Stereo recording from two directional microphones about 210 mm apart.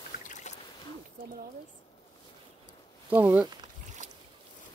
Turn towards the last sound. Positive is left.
turn(degrees=-10)  # may be behind; listen again after turning